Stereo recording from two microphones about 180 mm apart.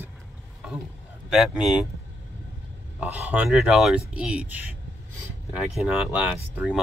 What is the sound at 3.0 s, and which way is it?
Speech, 10° right (ahead or behind).